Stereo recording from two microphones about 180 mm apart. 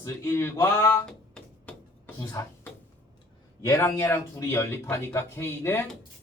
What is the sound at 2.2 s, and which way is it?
Speech, 15° left (ahead or behind).